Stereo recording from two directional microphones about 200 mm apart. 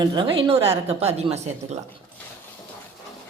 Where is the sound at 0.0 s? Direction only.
25° right (ahead or behind).